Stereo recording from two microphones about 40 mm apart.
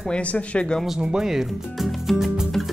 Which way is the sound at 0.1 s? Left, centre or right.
Left.